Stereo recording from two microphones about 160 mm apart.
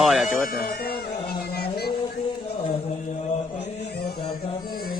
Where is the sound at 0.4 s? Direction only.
65° left (ahead or behind).